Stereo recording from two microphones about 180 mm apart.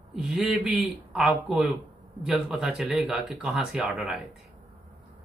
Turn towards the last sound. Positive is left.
turn(degrees=-5)  # may be behind; listen again after turning